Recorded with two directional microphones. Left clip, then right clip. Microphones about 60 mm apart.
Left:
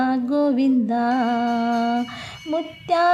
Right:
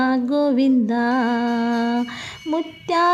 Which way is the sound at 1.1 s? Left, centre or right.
Centre.